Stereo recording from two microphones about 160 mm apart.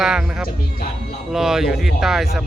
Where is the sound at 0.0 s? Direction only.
5° right (ahead or behind).